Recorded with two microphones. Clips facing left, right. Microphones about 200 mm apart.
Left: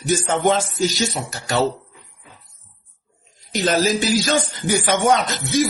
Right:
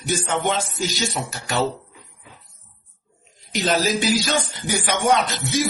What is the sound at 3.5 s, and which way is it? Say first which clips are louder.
A man's voice: left 2 dB; 45° left (ahead or behind).